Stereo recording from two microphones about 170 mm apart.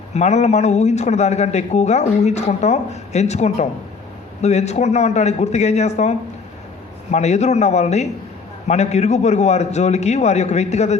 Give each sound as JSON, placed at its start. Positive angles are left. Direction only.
{"t": 0.1, "sound": "a man's voice", "side_deg": 40}